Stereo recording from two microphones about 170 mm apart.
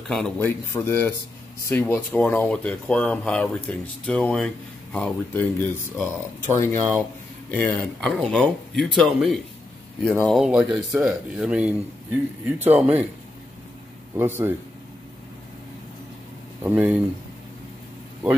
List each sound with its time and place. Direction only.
0.1 s speech: 5° left (ahead or behind)
14.1 s speech: 15° right (ahead or behind)
16.6 s speech: 10° right (ahead or behind)